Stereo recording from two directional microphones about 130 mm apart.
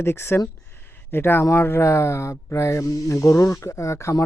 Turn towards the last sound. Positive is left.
turn(degrees=20)  # may be behind; listen again after turning